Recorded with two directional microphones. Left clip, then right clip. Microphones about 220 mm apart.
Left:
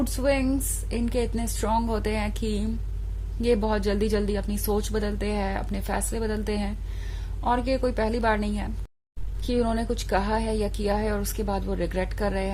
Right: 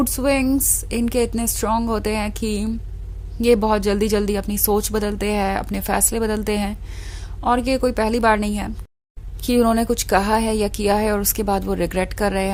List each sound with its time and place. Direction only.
0.0 s speech: 25° right (ahead or behind)